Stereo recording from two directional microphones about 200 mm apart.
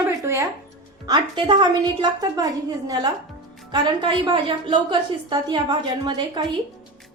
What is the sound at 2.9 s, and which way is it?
A woman's voice, 20° right (ahead or behind).